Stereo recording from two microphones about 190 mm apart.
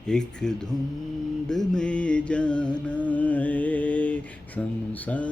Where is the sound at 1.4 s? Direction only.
5° left (ahead or behind).